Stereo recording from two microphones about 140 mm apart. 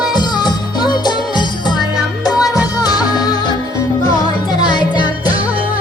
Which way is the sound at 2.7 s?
30° left (ahead or behind).